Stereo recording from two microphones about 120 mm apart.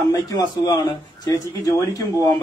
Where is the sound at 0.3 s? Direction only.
35° left (ahead or behind).